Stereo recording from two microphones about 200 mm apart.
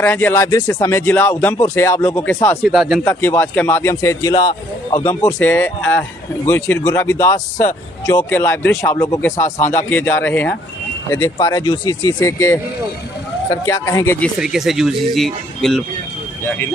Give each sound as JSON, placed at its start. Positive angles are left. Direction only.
{"t": 0.0, "sound": "a man's voice", "side_deg": 10}
{"t": 3.0, "sound": "a man's voice", "side_deg": 10}
{"t": 14.3, "sound": "speech", "side_deg": 0}